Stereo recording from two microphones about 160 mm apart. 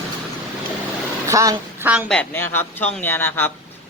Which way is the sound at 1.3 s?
20° right (ahead or behind).